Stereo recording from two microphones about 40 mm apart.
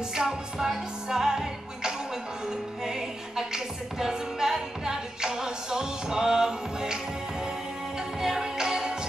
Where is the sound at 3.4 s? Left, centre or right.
Centre.